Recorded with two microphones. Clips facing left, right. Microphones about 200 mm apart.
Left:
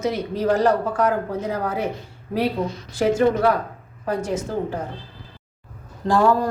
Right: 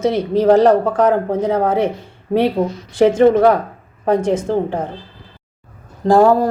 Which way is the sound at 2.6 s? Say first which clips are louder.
Right 7 dB; 50° right (ahead or behind).